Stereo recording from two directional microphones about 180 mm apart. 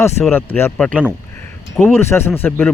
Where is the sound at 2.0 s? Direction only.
15° left (ahead or behind).